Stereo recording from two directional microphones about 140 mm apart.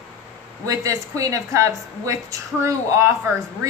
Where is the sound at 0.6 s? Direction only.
25° right (ahead or behind).